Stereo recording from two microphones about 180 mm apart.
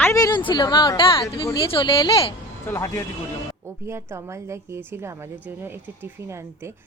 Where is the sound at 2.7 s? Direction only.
15° left (ahead or behind).